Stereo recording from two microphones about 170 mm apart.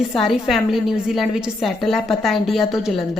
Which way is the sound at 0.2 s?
Centre (ahead or behind).